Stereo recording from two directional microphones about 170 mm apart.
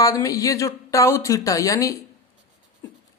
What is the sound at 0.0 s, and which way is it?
Speech, 20° left (ahead or behind).